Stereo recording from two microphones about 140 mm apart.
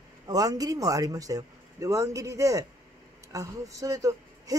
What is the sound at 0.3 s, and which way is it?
Speech, 25° right (ahead or behind).